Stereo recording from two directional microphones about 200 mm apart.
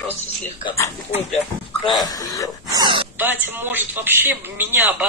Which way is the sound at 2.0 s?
20° left (ahead or behind).